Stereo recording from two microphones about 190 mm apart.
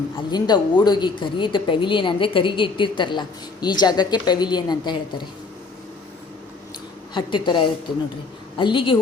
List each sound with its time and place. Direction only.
0.2 s speech: 25° left (ahead or behind)
7.1 s speech: 25° left (ahead or behind)